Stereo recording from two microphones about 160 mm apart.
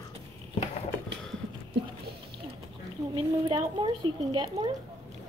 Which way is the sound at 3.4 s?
30° right (ahead or behind).